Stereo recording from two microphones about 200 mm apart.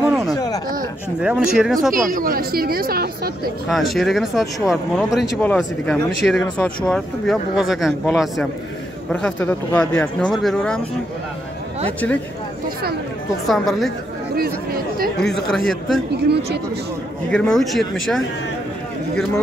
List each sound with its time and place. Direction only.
0.0 s a sound: centre (ahead or behind)
1.2 s speech: 5° right (ahead or behind)
2.0 s speech: 45° right (ahead or behind)
3.6 s speech: centre (ahead or behind)
13.5 s speech: centre (ahead or behind)
15.4 s speech: centre (ahead or behind)
17.3 s speech: 5° left (ahead or behind)